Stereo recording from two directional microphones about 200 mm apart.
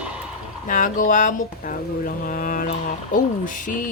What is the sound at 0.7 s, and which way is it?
Speech, 40° left (ahead or behind).